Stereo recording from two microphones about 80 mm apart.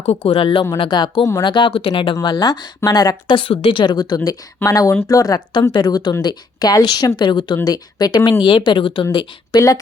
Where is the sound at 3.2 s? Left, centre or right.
Left.